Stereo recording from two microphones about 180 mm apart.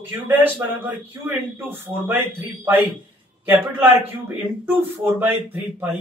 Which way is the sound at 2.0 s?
10° right (ahead or behind).